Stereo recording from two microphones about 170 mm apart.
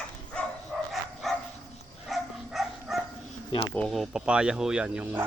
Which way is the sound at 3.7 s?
5° left (ahead or behind).